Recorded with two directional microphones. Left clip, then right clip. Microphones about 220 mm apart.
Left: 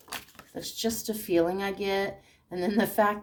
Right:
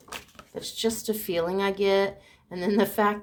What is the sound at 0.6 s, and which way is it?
Speech, 35° right (ahead or behind).